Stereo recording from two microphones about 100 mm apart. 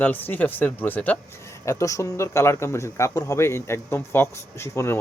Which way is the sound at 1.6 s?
30° left (ahead or behind).